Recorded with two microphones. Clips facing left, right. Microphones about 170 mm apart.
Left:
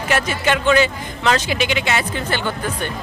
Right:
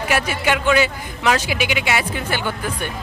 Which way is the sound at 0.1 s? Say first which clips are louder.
Left 1 dB; 10° right (ahead or behind).